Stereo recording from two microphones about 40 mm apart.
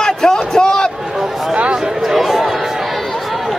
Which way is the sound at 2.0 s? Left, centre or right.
Centre.